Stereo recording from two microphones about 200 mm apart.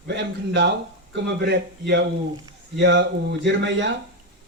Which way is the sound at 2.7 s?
60° right (ahead or behind).